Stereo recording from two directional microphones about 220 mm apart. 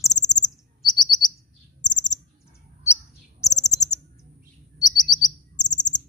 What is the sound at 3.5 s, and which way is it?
Bird, 15° left (ahead or behind).